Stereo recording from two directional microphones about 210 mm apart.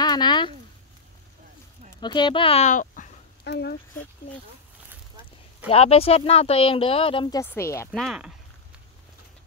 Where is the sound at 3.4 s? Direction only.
50° left (ahead or behind).